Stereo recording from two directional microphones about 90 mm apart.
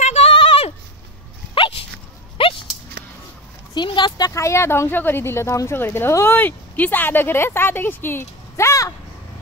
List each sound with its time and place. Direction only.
0.3 s a sound: 80° left
1.5 s dog: 75° left (ahead or behind)
2.4 s dog: 90° left
3.7 s speech: 60° left (ahead or behind)
4.3 s speech: 30° left (ahead or behind)